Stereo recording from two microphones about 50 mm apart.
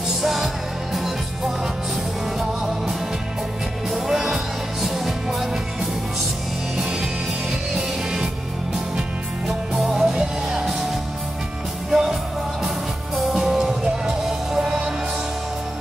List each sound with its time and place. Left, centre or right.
0.2 s music: centre
3.9 s music: centre
9.5 s music: centre
11.9 s music: centre